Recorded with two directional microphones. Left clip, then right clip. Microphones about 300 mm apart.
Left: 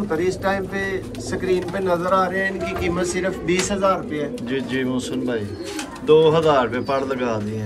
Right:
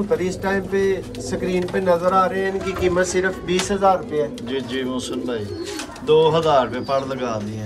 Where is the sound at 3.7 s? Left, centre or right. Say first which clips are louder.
Right 3 dB; right.